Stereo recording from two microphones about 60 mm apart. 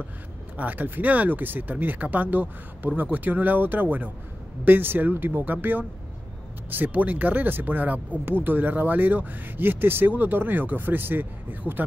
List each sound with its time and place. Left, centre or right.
0.6 s speech: right